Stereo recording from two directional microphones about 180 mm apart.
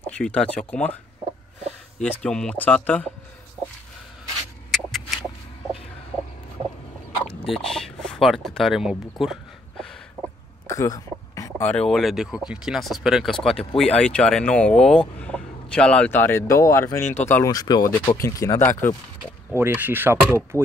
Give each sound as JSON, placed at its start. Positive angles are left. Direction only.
{"t": 0.0, "sound": "speech", "side_deg": 5}
{"t": 2.0, "sound": "speech", "side_deg": 5}
{"t": 4.6, "sound": "a sound", "side_deg": 0}
{"t": 7.2, "sound": "a sound", "side_deg": 0}
{"t": 10.7, "sound": "speech", "side_deg": 20}
{"t": 19.5, "sound": "speech", "side_deg": -10}